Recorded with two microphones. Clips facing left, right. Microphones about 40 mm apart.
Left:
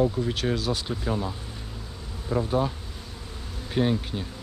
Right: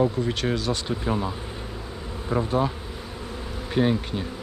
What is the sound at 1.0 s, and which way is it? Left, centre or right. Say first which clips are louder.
Speech: right 3 dB; right.